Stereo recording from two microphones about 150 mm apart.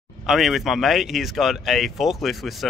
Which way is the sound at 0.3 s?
Centre (ahead or behind).